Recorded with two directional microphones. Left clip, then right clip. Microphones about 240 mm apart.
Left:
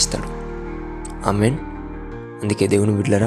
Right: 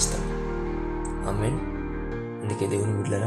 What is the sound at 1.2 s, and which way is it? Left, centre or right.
Speech, left.